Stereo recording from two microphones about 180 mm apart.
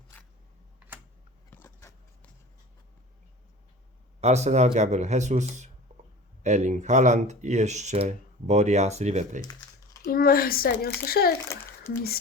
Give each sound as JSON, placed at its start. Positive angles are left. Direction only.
{"t": 0.8, "sound": "typing", "side_deg": -5}
{"t": 1.5, "sound": "a sound", "side_deg": 15}
{"t": 4.2, "sound": "speech", "side_deg": -35}
{"t": 9.4, "sound": "typing", "side_deg": 20}
{"t": 10.1, "sound": "speech", "side_deg": 55}
{"t": 11.3, "sound": "a child's voice", "side_deg": 15}